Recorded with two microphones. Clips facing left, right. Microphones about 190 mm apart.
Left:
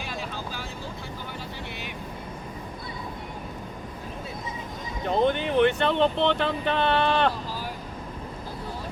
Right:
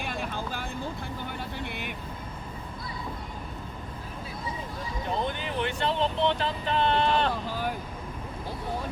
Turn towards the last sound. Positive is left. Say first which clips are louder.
# right 3 dB
turn(degrees=-60)  # may be behind; listen again after turning